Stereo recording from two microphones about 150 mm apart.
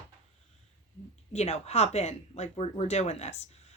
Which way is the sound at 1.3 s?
45° left (ahead or behind).